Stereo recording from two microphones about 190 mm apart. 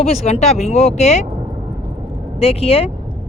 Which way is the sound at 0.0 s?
35° left (ahead or behind).